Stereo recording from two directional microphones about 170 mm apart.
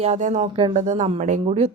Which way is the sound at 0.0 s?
45° right (ahead or behind).